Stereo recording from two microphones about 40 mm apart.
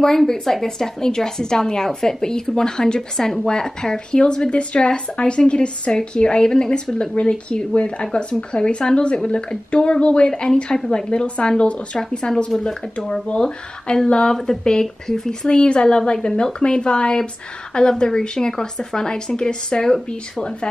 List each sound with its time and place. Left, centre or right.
0.3 s a woman's voice: centre
15.4 s speech: left